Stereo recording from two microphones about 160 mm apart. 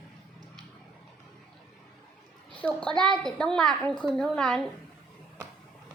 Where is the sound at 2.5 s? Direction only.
10° left (ahead or behind).